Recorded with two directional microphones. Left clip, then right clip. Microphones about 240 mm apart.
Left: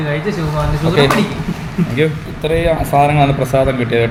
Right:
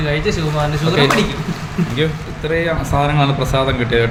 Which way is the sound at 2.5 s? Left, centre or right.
Right.